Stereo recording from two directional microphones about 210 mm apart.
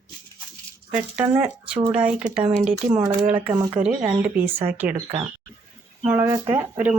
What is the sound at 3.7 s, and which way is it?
Speech, 5° right (ahead or behind).